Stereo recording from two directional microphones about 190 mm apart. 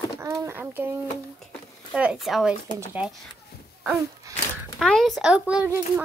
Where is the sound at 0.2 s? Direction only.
15° right (ahead or behind).